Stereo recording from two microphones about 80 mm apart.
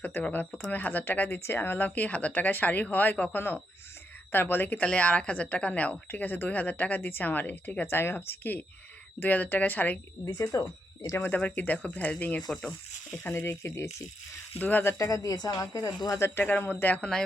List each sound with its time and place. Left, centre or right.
0.0 s a woman's voice: left
10.5 s speech: left
11.2 s a woman's voice: centre
13.3 s speech: left
14.6 s a woman's voice: left
14.9 s speech: left
16.4 s a woman's voice: centre